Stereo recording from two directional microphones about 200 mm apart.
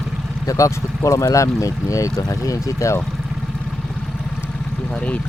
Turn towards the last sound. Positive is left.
turn(degrees=5)  # may be behind; listen again after turning